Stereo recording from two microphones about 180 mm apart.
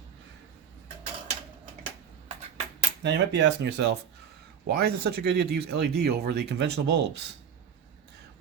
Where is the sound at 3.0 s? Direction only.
75° right (ahead or behind).